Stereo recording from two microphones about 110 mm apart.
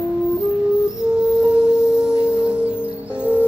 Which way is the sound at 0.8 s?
10° right (ahead or behind).